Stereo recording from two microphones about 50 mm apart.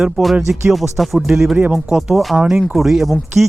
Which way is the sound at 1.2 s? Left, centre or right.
Centre.